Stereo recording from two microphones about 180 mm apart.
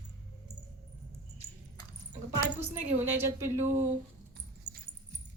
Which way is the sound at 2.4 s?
10° right (ahead or behind).